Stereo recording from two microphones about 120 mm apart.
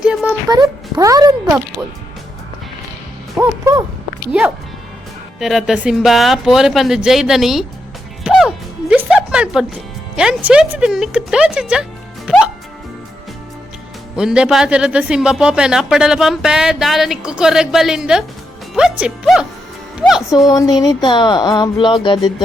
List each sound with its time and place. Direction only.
0.0 s music: 5° right (ahead or behind)
0.4 s a child's voice: 30° right (ahead or behind)
3.3 s music: 25° right (ahead or behind)
5.4 s a man's voice: centre (ahead or behind)
8.2 s music: 5° right (ahead or behind)
10.2 s speech: 5° right (ahead or behind)
14.2 s a man's voice: 5° right (ahead or behind)
20.5 s speech: 30° left (ahead or behind)